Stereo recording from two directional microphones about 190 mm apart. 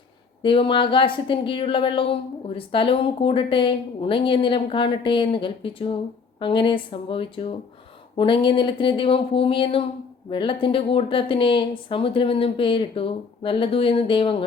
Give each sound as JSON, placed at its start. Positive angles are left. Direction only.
{"t": 0.4, "sound": "speech", "side_deg": 25}